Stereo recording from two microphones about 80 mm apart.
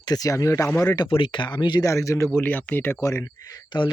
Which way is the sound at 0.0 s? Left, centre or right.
Left.